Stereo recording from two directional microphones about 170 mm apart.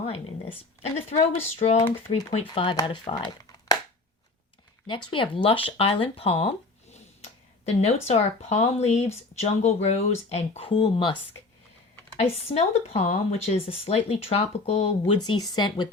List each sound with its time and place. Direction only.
0.8 s speech: 40° left (ahead or behind)
4.9 s speech: 30° left (ahead or behind)
12.2 s speech: 35° left (ahead or behind)
15.2 s speech: 25° left (ahead or behind)